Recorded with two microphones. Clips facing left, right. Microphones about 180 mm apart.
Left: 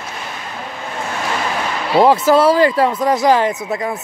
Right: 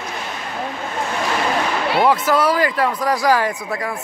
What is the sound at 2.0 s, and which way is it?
Speech, 30° left (ahead or behind).